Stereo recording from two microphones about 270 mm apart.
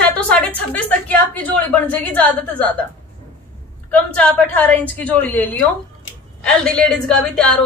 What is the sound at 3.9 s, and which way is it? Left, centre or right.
A woman's voice, centre.